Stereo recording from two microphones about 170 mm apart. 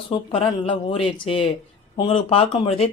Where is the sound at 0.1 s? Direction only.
30° left (ahead or behind).